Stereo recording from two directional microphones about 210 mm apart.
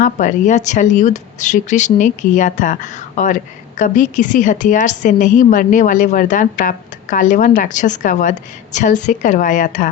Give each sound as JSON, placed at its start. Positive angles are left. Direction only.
{"t": 0.0, "sound": "a woman's voice", "side_deg": 35}